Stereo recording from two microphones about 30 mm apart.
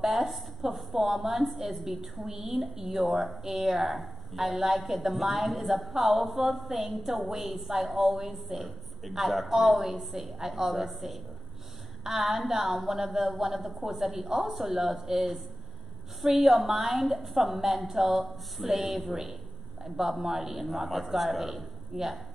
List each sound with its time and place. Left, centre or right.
0.0 s speech: centre
21.9 s speech: right